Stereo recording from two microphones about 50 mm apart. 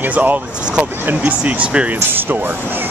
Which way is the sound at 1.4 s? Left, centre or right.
Right.